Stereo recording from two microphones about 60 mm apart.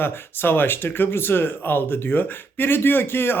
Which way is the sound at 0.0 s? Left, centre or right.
Left.